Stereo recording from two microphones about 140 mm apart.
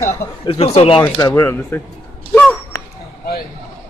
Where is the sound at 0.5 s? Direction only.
45° left (ahead or behind).